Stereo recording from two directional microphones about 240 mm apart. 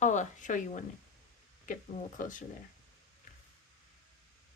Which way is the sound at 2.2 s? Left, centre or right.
Left.